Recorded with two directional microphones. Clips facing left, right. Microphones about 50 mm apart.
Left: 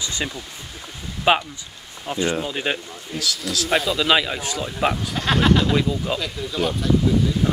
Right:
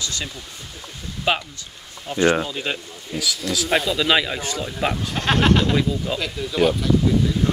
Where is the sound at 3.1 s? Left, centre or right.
Centre.